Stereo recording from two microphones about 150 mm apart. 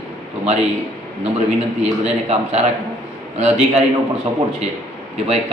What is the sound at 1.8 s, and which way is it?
A man's voice, 45° right (ahead or behind).